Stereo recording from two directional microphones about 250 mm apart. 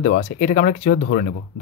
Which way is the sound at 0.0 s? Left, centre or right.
Left.